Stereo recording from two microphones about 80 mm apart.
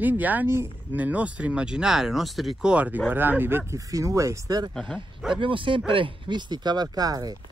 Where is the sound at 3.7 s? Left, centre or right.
Right.